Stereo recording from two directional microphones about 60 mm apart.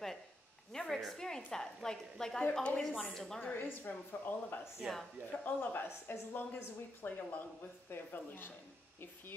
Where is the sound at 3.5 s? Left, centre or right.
Left.